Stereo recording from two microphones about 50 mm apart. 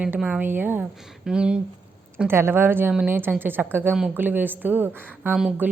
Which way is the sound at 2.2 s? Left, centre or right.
Right.